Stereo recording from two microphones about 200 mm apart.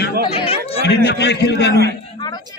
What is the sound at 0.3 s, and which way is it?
Chatter, 30° left (ahead or behind).